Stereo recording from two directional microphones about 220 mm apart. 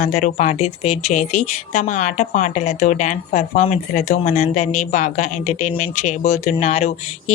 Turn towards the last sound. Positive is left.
turn(degrees=30)  # may be behind; listen again after turning